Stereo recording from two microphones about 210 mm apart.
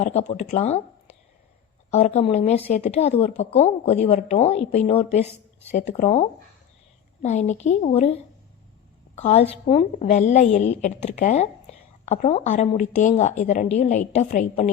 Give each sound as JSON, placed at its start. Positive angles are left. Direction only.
{"t": 0.0, "sound": "a woman's voice", "side_deg": 30}
{"t": 9.1, "sound": "a woman's voice", "side_deg": 30}